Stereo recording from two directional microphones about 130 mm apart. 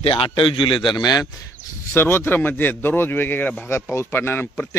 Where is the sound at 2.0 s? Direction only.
15° left (ahead or behind).